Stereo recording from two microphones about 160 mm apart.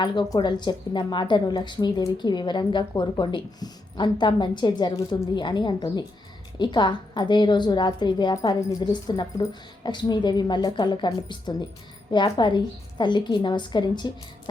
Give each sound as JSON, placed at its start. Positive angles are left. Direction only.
{"t": 0.0, "sound": "a woman's voice", "side_deg": 30}